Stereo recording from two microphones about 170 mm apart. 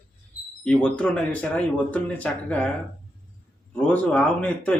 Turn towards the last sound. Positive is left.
turn(degrees=5)  # may be behind; listen again after turning